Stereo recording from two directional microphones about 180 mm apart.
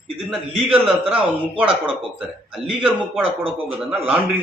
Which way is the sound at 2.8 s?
30° right (ahead or behind).